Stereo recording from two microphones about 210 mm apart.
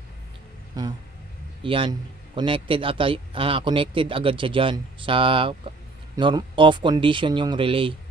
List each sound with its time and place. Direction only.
0.8 s a man's voice: 15° right (ahead or behind)